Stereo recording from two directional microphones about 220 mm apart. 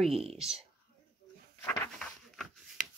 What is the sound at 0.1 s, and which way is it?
Speech, 25° right (ahead or behind).